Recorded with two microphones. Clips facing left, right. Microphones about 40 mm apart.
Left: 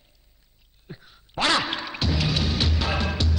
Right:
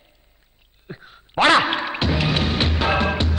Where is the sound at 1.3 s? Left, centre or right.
Right.